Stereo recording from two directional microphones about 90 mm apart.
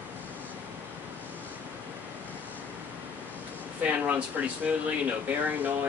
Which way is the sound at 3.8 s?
15° right (ahead or behind).